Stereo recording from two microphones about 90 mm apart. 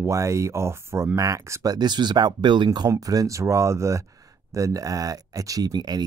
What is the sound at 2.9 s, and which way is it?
Speech, 40° right (ahead or behind).